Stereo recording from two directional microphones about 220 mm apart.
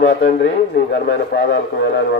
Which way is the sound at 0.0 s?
50° left (ahead or behind).